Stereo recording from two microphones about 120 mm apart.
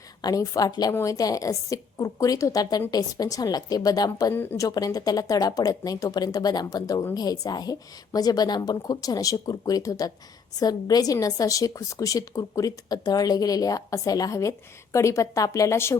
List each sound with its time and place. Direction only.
0.2 s a woman's voice: 30° left (ahead or behind)